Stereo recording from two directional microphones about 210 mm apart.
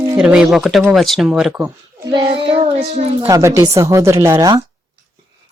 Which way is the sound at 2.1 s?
20° right (ahead or behind).